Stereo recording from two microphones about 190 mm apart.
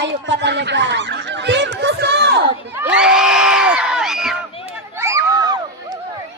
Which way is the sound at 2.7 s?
10° right (ahead or behind).